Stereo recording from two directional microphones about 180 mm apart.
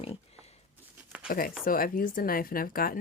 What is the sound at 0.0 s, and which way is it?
Pig, 35° left (ahead or behind).